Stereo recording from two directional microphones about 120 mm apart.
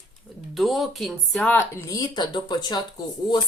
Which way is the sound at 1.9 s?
35° left (ahead or behind).